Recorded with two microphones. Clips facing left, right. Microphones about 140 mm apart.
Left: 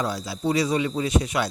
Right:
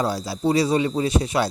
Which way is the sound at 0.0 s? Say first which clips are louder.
Right 4 dB; 35° right (ahead or behind).